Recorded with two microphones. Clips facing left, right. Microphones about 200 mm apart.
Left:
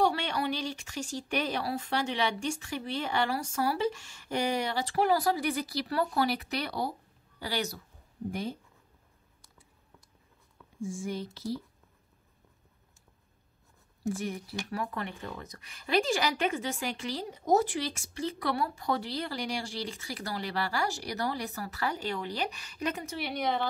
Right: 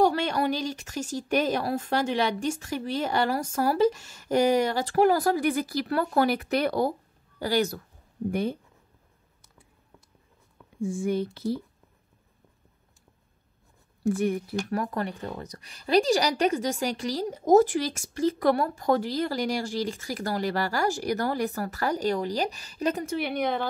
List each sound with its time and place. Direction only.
0.0 s speech: 45° right (ahead or behind)
8.3 s speech: 60° right (ahead or behind)
10.8 s speech: 60° right (ahead or behind)
14.0 s speech: 55° right (ahead or behind); by 23.0 s 35° right (ahead or behind)
23.0 s speech: 55° right (ahead or behind)